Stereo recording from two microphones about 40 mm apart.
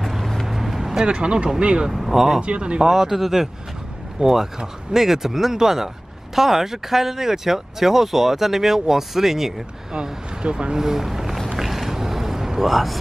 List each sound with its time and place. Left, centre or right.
0.0 s vehicle: centre
0.5 s vehicle: centre
1.0 s speech: right
1.9 s speech: centre
2.4 s speech: right
2.8 s speech: centre
10.4 s speech: right
10.8 s vehicle: centre